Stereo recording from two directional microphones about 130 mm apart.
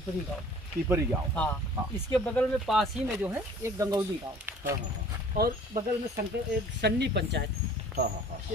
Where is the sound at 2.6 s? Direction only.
Centre (ahead or behind).